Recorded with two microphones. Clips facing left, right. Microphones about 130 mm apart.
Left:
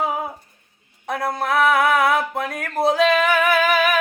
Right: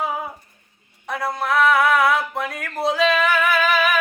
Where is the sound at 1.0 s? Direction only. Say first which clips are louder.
Left 1 dB; 50° left (ahead or behind).